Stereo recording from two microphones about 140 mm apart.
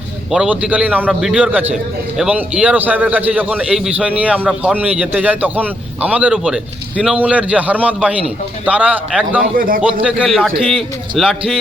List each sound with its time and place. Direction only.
0.3 s a man's voice: 5° right (ahead or behind)
9.6 s a man's voice: 90° right
10.0 s a man's voice: 5° right (ahead or behind)